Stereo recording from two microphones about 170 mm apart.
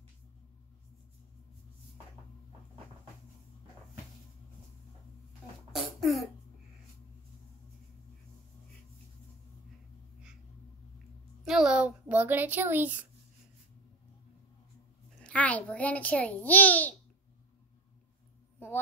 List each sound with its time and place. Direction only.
5.7 s cough: centre (ahead or behind)
11.4 s a woman's voice: 5° right (ahead or behind)
15.2 s a child's voice: 10° left (ahead or behind)